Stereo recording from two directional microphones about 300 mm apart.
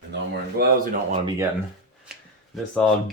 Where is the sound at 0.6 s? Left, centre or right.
Right.